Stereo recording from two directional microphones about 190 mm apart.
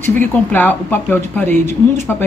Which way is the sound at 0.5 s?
10° left (ahead or behind).